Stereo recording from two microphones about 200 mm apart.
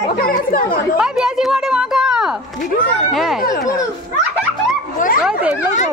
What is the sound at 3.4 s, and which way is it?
Speech, 45° left (ahead or behind).